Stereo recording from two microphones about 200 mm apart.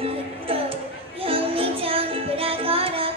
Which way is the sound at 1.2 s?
30° right (ahead or behind).